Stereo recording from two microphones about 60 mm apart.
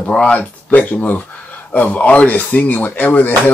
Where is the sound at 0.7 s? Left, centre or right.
Left.